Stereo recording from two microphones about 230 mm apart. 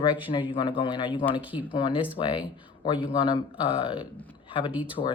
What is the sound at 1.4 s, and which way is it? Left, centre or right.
Speech, centre.